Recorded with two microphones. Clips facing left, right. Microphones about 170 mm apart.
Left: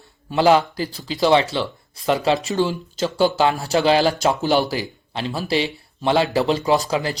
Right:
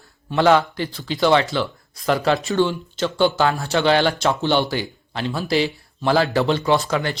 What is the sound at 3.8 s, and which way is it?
Speech, 35° left (ahead or behind).